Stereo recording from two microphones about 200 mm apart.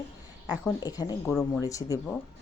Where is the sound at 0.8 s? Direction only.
20° left (ahead or behind).